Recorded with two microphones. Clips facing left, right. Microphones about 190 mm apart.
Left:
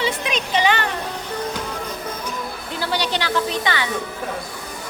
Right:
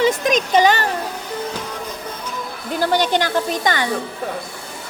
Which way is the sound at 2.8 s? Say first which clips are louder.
Right 6 dB; 50° right (ahead or behind).